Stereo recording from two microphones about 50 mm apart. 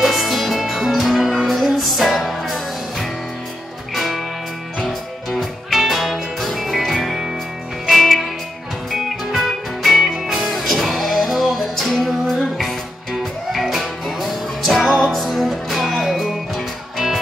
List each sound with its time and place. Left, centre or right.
0.0 s music: centre
5.4 s music: centre